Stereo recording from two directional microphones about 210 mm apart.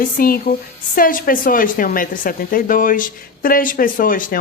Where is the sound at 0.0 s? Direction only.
45° left (ahead or behind).